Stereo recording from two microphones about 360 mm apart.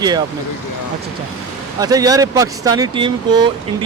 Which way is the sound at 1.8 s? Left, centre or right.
Centre.